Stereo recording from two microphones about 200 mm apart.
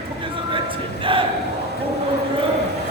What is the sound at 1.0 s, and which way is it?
Speech, 25° right (ahead or behind).